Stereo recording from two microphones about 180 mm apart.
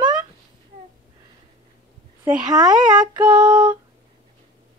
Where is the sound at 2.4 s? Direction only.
20° right (ahead or behind).